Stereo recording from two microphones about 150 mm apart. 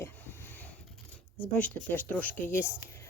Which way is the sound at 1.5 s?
10° left (ahead or behind).